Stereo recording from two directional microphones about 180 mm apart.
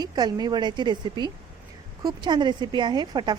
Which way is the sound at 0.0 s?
20° right (ahead or behind).